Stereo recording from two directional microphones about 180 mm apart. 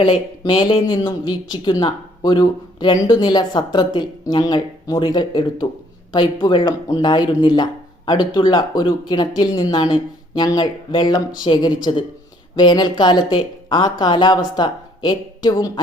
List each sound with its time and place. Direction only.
0.0 s speech: 30° left (ahead or behind)